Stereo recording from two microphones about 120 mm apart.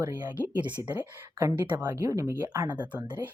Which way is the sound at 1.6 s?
35° right (ahead or behind).